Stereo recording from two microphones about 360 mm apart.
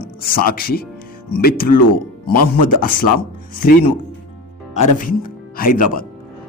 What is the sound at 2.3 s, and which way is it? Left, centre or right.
Speech, left.